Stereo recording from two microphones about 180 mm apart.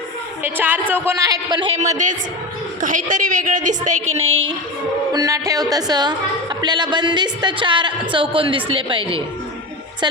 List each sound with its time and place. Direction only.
0.4 s a woman's voice: 10° right (ahead or behind); by 4.5 s 30° right (ahead or behind)
5.1 s a woman's voice: 20° right (ahead or behind)